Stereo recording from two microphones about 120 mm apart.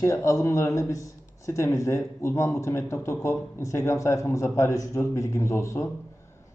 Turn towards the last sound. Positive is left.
turn(degrees=25)  # may be behind; listen again after turning